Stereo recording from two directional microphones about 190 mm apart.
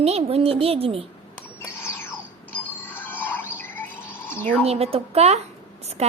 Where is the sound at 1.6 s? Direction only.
15° left (ahead or behind).